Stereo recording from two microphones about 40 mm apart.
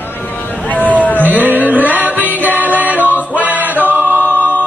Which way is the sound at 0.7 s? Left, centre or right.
Left.